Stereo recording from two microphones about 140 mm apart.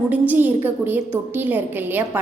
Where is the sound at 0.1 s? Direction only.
10° right (ahead or behind).